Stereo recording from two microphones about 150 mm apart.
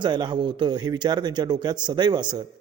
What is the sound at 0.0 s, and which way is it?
A man's voice, 30° right (ahead or behind).